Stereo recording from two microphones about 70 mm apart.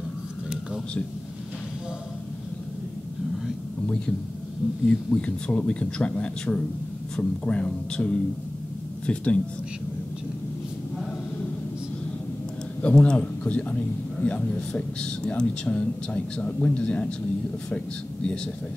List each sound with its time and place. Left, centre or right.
3.8 s a man's voice: centre
12.8 s a man's voice: centre